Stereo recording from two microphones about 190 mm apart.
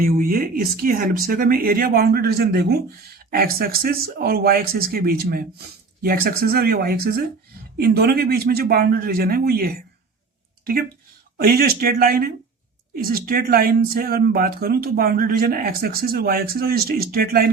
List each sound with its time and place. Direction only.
0.0 s speech: 50° right (ahead or behind)
11.3 s speech: 55° right (ahead or behind)